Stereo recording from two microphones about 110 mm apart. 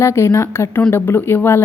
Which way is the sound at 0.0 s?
25° left (ahead or behind).